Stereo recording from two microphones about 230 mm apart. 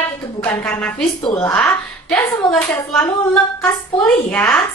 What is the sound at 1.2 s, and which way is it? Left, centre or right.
Speech, left.